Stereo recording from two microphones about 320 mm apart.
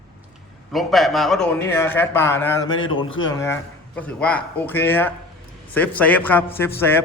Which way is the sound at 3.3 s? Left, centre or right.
Centre.